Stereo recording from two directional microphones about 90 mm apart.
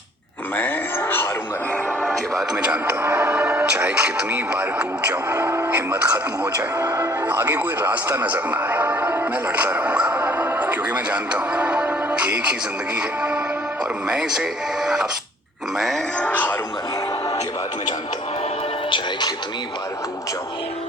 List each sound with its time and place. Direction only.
0.5 s a sound: 20° left (ahead or behind)
2.6 s speech: 15° right (ahead or behind)
6.7 s speech: 35° right (ahead or behind)
7.3 s speech: 20° right (ahead or behind)
16.1 s speech: 15° left (ahead or behind)
18.9 s speech: 70° left (ahead or behind)